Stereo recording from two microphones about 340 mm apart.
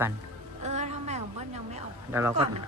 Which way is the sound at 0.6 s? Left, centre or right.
Centre.